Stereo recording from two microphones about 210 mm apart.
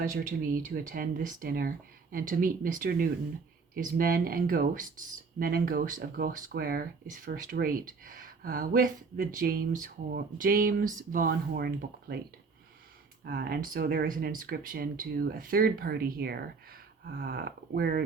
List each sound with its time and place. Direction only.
0.0 s speech: 40° right (ahead or behind)
13.2 s speech: 45° right (ahead or behind)